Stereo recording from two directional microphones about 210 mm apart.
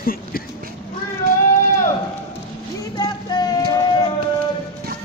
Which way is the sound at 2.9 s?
20° left (ahead or behind).